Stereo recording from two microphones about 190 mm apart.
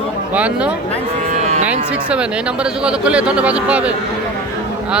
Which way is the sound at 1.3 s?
40° right (ahead or behind).